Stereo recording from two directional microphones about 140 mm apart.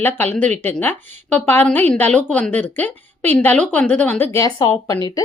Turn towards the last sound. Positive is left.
turn(degrees=25)  # may be behind; listen again after turning